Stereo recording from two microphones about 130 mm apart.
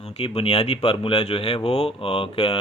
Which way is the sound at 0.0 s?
50° left (ahead or behind).